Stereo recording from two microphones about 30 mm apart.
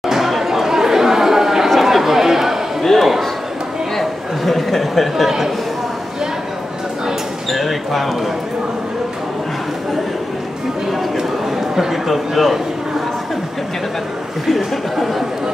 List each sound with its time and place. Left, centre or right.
0.0 s chatter: centre
1.8 s a sound: centre
7.5 s basketball bounce: centre
11.1 s a sound: centre
12.1 s a man's voice: centre
14.6 s speech: centre